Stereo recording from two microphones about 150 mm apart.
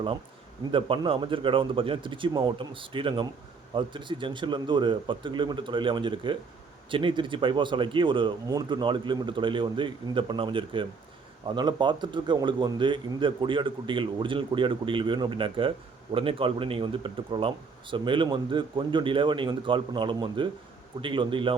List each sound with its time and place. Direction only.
0.7 s speech: 35° right (ahead or behind)